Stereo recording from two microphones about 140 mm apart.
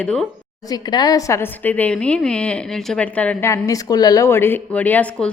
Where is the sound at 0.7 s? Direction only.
30° left (ahead or behind); by 3.5 s 10° left (ahead or behind).